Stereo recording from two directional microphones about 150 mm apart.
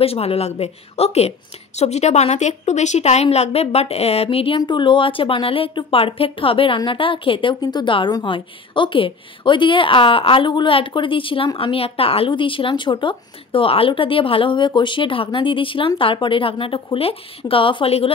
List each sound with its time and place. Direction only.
0.0 s a woman's voice: 40° left (ahead or behind)